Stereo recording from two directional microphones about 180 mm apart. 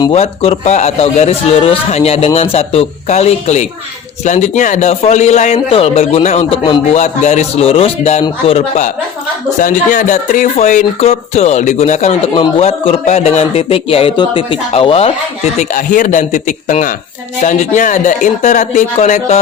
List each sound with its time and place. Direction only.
0.0 s a man's voice: 30° left (ahead or behind)
12.3 s a man's voice: 30° left (ahead or behind)
15.5 s a man's voice: 45° left (ahead or behind)